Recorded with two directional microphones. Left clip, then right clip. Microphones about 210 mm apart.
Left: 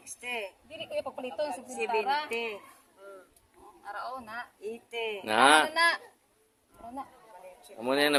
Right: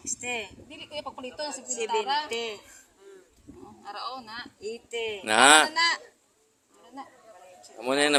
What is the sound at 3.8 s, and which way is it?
Speech, 15° left (ahead or behind).